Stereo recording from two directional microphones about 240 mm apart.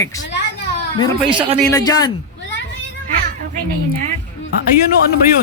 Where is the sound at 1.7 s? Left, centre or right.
Centre.